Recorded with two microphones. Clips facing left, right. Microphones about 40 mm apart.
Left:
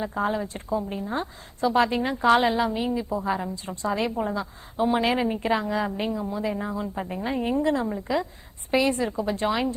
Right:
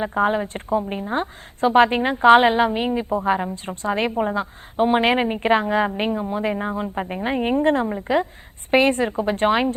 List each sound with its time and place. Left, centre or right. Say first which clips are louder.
0.0 s a woman's voice: right 6 dB; right